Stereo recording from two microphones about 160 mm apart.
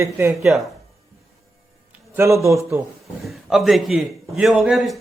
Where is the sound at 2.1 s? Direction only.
15° right (ahead or behind).